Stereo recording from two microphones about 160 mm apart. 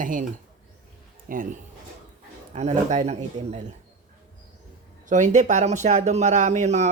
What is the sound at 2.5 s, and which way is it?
Speech, 45° right (ahead or behind).